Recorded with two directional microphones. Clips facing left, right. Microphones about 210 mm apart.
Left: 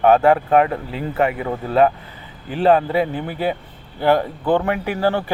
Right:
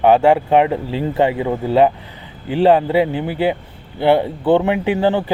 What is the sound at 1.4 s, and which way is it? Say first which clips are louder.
A man's voice: right 2 dB; 15° right (ahead or behind).